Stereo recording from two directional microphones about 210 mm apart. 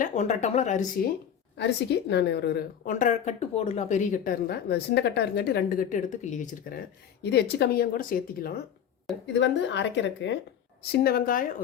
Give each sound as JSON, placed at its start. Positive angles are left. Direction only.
{"t": 0.0, "sound": "speech", "side_deg": 35}
{"t": 1.5, "sound": "a woman's voice", "side_deg": 55}
{"t": 2.9, "sound": "speech", "side_deg": 35}
{"t": 7.2, "sound": "a woman's voice", "side_deg": 50}
{"t": 9.2, "sound": "a woman's voice", "side_deg": 55}
{"t": 10.9, "sound": "a woman's voice", "side_deg": 45}